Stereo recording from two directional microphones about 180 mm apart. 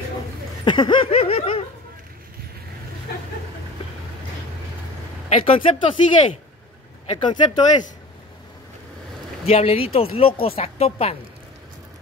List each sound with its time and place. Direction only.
0.7 s speech: 25° left (ahead or behind)
5.3 s speech: 30° left (ahead or behind)
9.4 s speech: 35° left (ahead or behind)